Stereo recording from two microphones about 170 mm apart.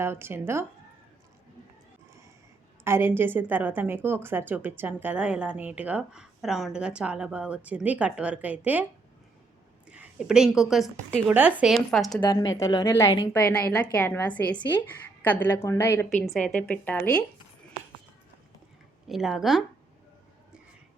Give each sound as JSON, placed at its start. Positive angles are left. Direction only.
{"t": 0.0, "sound": "a woman's voice", "side_deg": -15}
{"t": 2.8, "sound": "a woman's voice", "side_deg": -15}
{"t": 12.3, "sound": "a woman's voice", "side_deg": 20}
{"t": 16.0, "sound": "a woman's voice", "side_deg": 0}
{"t": 19.0, "sound": "speech", "side_deg": 0}